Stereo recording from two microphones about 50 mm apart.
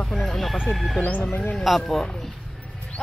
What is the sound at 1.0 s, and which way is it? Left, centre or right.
Speech, left.